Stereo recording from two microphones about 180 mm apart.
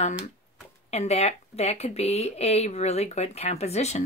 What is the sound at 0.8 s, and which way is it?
A woman's voice, 35° left (ahead or behind).